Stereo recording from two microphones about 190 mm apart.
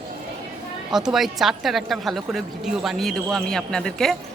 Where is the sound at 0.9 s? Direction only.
Centre (ahead or behind).